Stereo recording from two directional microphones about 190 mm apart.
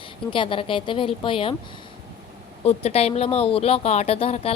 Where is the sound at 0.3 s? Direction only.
25° left (ahead or behind).